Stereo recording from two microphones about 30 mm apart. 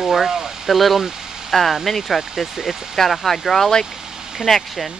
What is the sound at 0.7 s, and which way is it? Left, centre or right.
Speech, centre.